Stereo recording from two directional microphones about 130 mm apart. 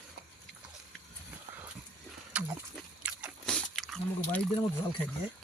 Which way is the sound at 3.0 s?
10° right (ahead or behind).